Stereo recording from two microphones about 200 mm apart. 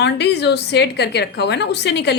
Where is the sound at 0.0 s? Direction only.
55° left (ahead or behind).